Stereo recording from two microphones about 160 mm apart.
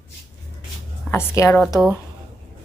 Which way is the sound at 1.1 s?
15° left (ahead or behind).